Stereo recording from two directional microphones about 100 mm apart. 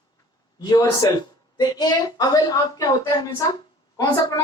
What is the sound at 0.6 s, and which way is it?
Speech, 45° left (ahead or behind).